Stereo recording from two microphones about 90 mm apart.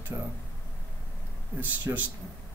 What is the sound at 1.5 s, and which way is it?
Speech, 20° right (ahead or behind).